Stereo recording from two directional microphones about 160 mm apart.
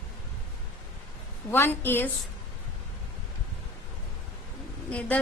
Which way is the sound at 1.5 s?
15° left (ahead or behind).